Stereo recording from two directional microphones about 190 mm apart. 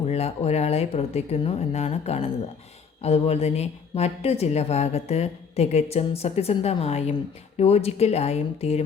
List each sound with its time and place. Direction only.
0.0 s speech: 35° left (ahead or behind)